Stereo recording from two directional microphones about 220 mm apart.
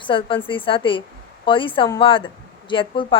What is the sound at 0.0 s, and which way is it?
A woman's voice, 25° left (ahead or behind).